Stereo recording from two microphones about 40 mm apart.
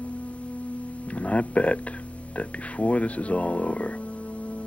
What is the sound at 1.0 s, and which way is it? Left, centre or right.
Speech, left.